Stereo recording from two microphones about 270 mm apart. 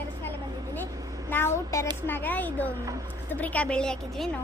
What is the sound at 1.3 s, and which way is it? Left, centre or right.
A woman's voice, centre.